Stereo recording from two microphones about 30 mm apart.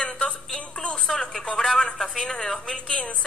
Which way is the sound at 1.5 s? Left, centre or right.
Centre.